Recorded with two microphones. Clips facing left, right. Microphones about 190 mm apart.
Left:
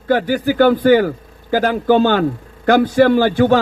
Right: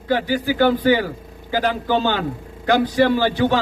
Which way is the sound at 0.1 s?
50° left (ahead or behind).